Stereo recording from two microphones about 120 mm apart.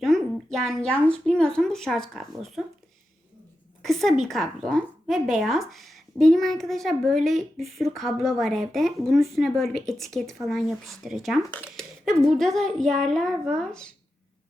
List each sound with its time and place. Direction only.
0.0 s a sound: 5° left (ahead or behind)
1.0 s speech: 5° left (ahead or behind)
3.8 s a woman's voice: centre (ahead or behind)